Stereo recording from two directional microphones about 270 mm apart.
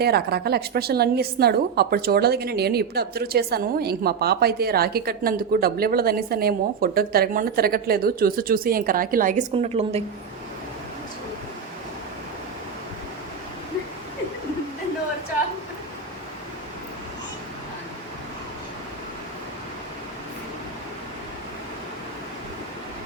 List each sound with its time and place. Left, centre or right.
0.0 s a woman's voice: right